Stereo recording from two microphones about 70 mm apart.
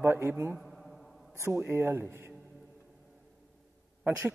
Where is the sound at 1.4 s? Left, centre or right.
Right.